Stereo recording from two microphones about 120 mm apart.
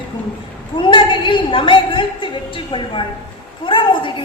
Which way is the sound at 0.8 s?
45° left (ahead or behind).